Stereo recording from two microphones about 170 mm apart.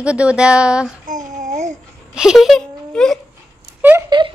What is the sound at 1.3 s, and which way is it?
Babbling, 45° right (ahead or behind).